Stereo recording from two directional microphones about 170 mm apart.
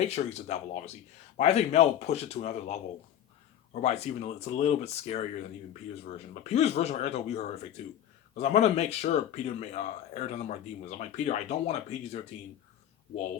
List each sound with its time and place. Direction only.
0.0 s speech: 40° left (ahead or behind)
6.5 s speech: 40° left (ahead or behind)